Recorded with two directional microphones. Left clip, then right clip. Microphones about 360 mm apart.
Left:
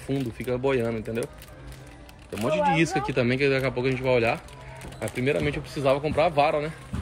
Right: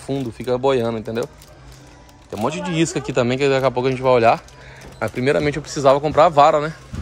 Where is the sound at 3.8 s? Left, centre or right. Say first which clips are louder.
Right 8 dB; centre.